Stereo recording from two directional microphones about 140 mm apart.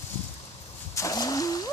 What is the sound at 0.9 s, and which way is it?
Splash, 25° left (ahead or behind).